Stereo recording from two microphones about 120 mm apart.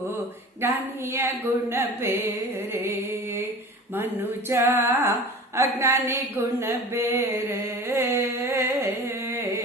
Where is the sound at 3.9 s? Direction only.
20° right (ahead or behind).